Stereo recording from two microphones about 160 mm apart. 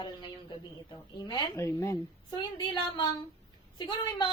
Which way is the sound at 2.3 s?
30° left (ahead or behind).